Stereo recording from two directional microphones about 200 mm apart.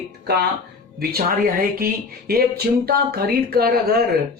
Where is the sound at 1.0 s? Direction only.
45° right (ahead or behind).